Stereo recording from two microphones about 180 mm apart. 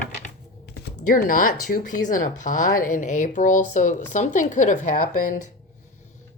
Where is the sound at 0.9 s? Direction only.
50° left (ahead or behind).